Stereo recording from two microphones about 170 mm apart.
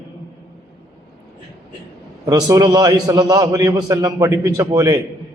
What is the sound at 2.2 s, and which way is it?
A man's voice, 20° right (ahead or behind).